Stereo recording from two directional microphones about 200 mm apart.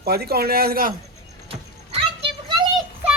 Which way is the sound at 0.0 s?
50° right (ahead or behind).